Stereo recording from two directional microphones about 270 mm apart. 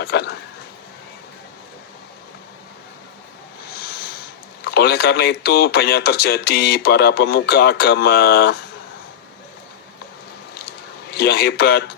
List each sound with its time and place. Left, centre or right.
0.0 s speech: left
4.6 s speech: left
11.1 s speech: left